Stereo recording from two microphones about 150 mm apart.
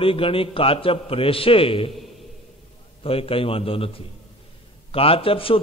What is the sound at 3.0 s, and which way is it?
Speech, 40° left (ahead or behind).